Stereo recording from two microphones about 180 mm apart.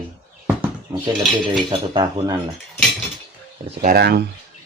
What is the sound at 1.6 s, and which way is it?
Speech, 25° right (ahead or behind).